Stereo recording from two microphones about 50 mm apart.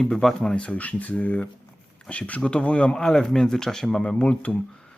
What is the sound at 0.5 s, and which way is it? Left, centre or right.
Speech, left.